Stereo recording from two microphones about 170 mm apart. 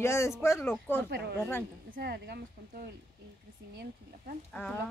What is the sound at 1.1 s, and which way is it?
Speech, 75° right (ahead or behind).